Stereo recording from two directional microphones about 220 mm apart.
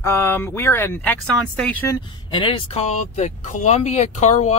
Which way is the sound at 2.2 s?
20° left (ahead or behind).